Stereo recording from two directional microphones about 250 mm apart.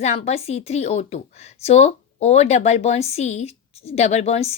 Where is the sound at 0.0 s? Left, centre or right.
Left.